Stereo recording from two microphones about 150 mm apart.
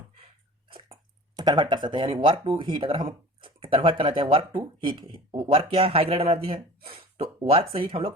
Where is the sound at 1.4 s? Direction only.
30° right (ahead or behind).